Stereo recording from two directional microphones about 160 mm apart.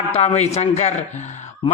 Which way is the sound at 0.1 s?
40° left (ahead or behind).